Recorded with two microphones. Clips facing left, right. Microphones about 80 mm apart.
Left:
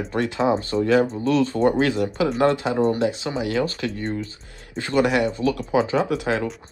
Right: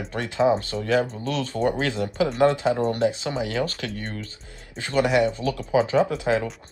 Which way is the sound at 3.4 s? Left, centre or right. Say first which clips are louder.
Left 5 dB; left.